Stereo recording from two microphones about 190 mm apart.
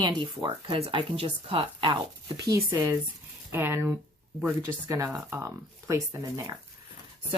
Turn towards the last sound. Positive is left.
turn(degrees=-15)  # may be behind; listen again after turning